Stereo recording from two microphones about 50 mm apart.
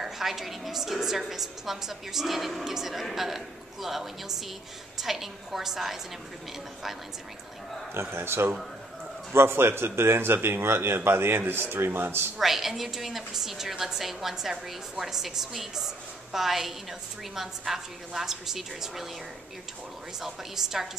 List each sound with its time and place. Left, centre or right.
0.0 s a woman's voice: centre
7.9 s speech: right
12.4 s a woman's voice: centre
20.2 s a woman's voice: centre